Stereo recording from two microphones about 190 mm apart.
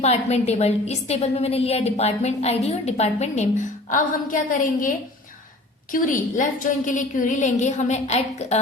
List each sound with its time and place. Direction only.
0.0 s a woman's voice: 35° left (ahead or behind)